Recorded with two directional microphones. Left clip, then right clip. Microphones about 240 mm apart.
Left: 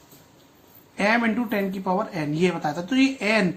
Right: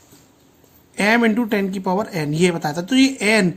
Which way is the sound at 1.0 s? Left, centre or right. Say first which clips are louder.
Right 5 dB; right.